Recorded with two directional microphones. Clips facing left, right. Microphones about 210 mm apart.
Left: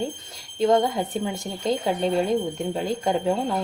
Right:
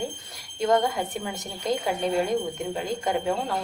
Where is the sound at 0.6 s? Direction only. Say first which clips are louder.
Left 3 dB; 25° left (ahead or behind).